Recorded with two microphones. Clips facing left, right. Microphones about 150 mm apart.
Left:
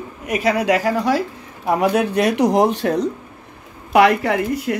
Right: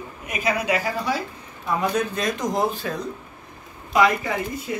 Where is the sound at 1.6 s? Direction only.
75° left (ahead or behind).